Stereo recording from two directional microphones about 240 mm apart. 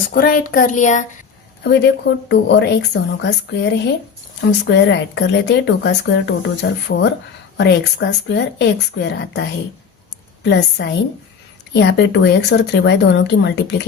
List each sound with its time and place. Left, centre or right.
0.1 s speech: left
1.6 s speech: left
10.4 s speech: left